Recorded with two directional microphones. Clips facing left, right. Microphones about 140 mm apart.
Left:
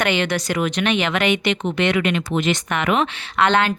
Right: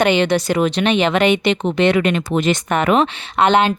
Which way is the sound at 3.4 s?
20° right (ahead or behind).